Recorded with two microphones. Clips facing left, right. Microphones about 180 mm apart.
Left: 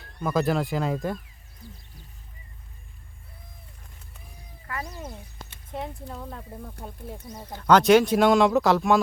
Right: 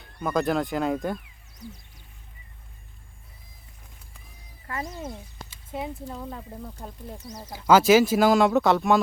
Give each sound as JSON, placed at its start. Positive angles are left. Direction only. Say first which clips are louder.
{"t": 0.0, "sound": "speech", "louder": "left 1 dB", "side_deg": 0}
{"t": 4.6, "sound": "speech", "louder": "right 2 dB", "side_deg": -25}
{"t": 5.7, "sound": "speech", "louder": "right 2 dB", "side_deg": 0}
{"t": 7.4, "sound": "speech", "louder": "even", "side_deg": -10}